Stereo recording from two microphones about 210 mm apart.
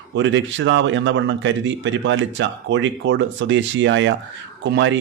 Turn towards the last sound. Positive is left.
turn(degrees=-60)  # may be behind; listen again after turning